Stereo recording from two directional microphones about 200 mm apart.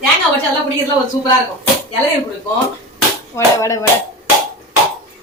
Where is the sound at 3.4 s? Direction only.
15° left (ahead or behind).